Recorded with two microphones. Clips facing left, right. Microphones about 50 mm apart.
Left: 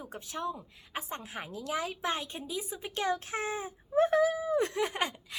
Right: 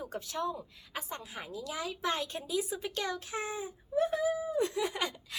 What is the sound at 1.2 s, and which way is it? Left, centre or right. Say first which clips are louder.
Speech: left 3 dB; left.